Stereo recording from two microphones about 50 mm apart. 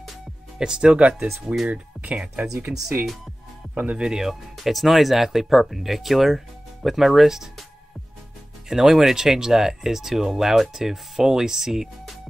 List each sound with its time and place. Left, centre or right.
0.6 s speech: centre
1.3 s speech: centre
1.7 s speech: right
3.7 s speech: right
4.0 s speech: centre
8.6 s speech: centre